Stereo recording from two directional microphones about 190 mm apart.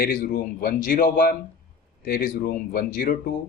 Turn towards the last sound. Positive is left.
turn(degrees=50)  # may be behind; listen again after turning